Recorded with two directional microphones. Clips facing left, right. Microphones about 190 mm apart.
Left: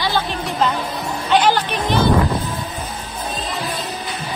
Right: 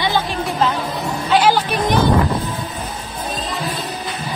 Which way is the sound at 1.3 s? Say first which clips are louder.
Right 1 dB; 5° right (ahead or behind).